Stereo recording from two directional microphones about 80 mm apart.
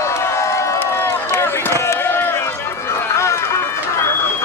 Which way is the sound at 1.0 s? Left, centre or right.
Left.